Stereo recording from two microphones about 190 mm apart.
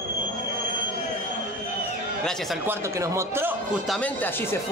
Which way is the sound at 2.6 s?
10° right (ahead or behind).